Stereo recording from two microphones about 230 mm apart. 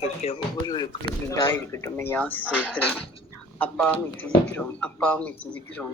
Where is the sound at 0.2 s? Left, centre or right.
Left.